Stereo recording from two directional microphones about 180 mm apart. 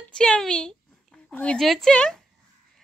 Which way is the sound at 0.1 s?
5° left (ahead or behind).